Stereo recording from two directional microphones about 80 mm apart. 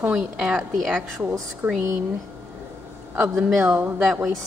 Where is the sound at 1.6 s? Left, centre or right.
Right.